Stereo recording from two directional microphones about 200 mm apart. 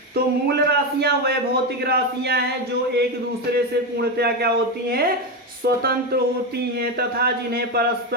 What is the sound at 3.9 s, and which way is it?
Speech, 55° right (ahead or behind).